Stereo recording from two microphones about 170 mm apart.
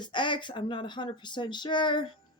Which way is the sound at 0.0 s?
30° left (ahead or behind).